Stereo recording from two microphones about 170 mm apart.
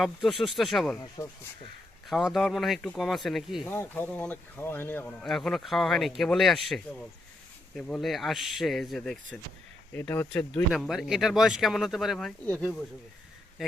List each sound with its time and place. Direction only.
0.0 s speech: centre (ahead or behind)
0.9 s speech: 20° left (ahead or behind)
2.0 s speech: centre (ahead or behind)
3.7 s speech: 10° left (ahead or behind)